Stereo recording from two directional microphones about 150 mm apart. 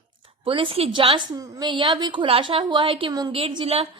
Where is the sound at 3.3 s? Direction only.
40° right (ahead or behind).